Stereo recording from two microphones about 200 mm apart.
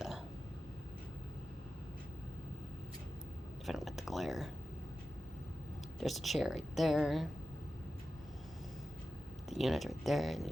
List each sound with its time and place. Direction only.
3.7 s speech: centre (ahead or behind)
6.0 s speech: centre (ahead or behind)
9.5 s speech: centre (ahead or behind)